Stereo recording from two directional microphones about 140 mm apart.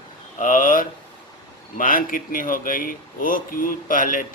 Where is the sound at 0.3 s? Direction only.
70° left (ahead or behind).